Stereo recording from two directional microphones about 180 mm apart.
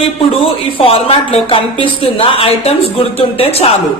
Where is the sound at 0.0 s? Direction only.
30° left (ahead or behind).